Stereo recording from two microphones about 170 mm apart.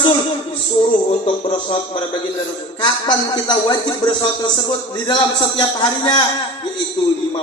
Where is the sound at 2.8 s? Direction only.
25° left (ahead or behind).